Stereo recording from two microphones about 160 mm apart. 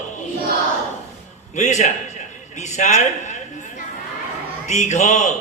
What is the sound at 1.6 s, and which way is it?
Speech, 45° left (ahead or behind).